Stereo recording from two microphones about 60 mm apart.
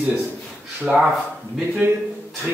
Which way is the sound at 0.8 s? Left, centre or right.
Right.